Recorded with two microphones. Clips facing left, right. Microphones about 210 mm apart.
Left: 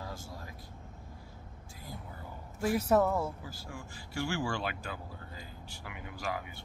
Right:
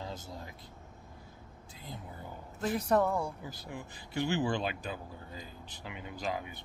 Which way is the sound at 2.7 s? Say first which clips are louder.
Left 1 dB; 5° left (ahead or behind).